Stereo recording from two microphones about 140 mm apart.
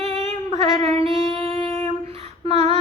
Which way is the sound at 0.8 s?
45° right (ahead or behind).